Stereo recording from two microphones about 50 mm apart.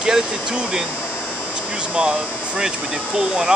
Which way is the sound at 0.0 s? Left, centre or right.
Centre.